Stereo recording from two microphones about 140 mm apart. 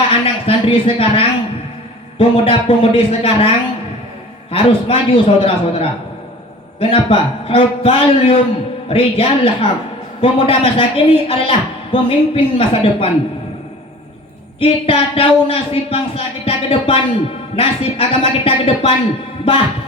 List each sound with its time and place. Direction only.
0.1 s a man's voice: 40° left (ahead or behind)
4.5 s a man's voice: 40° left (ahead or behind)
14.6 s a man's voice: 40° left (ahead or behind)